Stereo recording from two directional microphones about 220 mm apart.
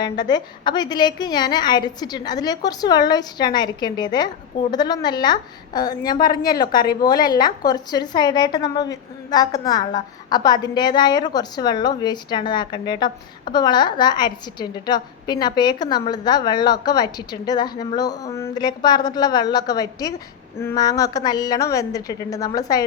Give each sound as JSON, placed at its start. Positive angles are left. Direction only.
{"t": 0.0, "sound": "a woman's voice", "side_deg": 20}